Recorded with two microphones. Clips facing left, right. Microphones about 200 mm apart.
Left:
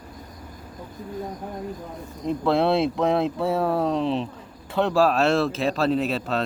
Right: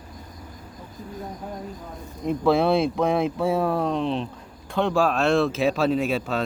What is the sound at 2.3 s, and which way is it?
Speech, centre (ahead or behind).